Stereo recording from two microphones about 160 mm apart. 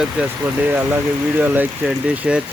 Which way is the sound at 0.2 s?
10° right (ahead or behind).